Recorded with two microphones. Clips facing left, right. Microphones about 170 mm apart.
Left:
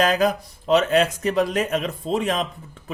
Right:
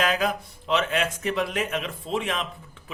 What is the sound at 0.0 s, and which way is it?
A man's voice, 40° left (ahead or behind).